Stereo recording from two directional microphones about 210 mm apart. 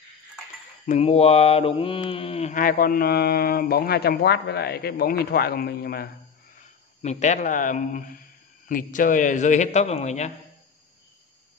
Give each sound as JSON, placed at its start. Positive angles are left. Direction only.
{"t": 0.8, "sound": "mantra", "side_deg": 30}
{"t": 7.0, "sound": "a man's voice", "side_deg": 35}